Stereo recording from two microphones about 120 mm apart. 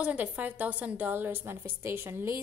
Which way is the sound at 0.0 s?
10° right (ahead or behind).